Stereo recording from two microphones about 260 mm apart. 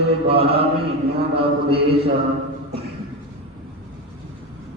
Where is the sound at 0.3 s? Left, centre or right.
Right.